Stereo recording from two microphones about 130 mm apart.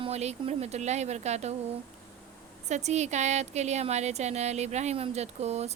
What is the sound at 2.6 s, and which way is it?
A woman's voice, 60° right (ahead or behind).